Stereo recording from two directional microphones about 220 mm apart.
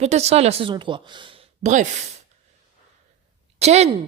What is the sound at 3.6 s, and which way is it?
Speech, 30° right (ahead or behind).